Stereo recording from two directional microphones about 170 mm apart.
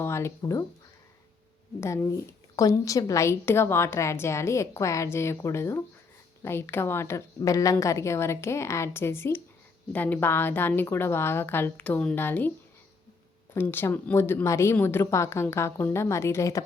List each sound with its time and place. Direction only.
0.0 s speech: 15° left (ahead or behind)
1.8 s a woman's voice: 15° left (ahead or behind)
13.5 s a woman's voice: 10° left (ahead or behind)